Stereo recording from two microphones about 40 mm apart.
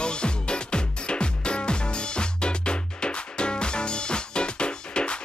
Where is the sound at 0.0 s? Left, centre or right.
Left.